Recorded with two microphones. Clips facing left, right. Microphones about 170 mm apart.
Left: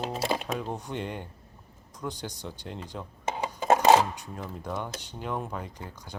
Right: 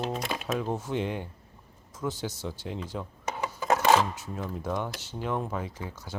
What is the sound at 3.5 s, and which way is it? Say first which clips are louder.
Filing: left 3 dB; 20° left (ahead or behind).